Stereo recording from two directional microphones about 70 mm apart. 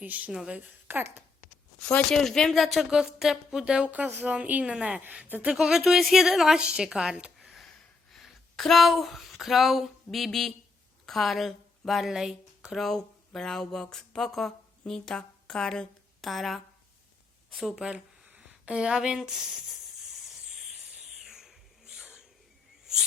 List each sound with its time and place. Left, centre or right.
0.0 s speech: right
0.3 s a woman's voice: centre
0.6 s a woman's voice: right
1.8 s a woman's voice: centre
4.0 s a woman's voice: right
5.5 s a woman's voice: centre
7.3 s a sound: centre
11.0 s speech: centre
12.8 s speech: centre
17.7 s a sound: centre